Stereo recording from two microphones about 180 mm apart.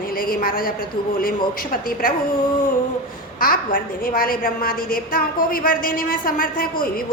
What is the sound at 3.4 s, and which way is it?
A woman's voice, 50° left (ahead or behind).